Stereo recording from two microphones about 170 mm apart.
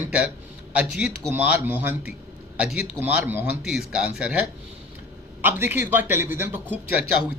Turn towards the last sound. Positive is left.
turn(degrees=-10)  # may be behind; listen again after turning